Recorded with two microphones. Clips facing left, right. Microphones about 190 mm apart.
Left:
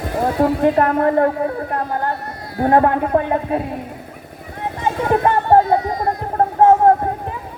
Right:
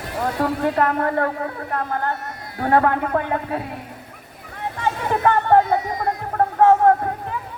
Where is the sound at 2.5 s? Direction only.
30° left (ahead or behind).